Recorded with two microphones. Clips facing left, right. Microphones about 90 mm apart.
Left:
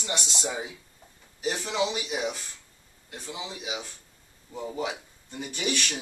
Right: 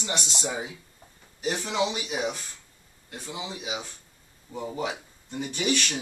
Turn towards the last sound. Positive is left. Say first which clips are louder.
# right 3 dB
turn(degrees=0)  # may be behind; listen again after turning